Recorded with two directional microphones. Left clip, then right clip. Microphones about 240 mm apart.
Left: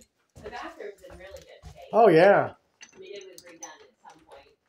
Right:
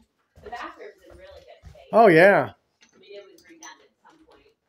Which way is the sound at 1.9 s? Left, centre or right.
Right.